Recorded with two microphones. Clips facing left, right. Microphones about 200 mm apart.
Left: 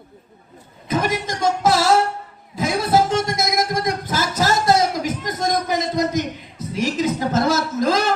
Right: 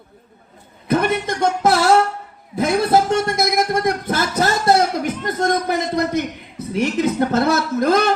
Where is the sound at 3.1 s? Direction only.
60° right (ahead or behind).